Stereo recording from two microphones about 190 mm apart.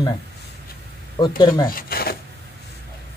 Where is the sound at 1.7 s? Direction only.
50° left (ahead or behind).